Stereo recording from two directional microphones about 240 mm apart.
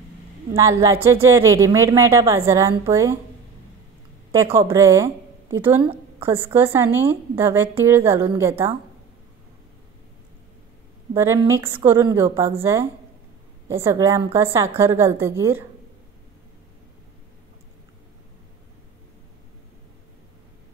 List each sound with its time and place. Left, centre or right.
0.6 s a woman's voice: centre
4.3 s a woman's voice: centre
11.1 s a woman's voice: centre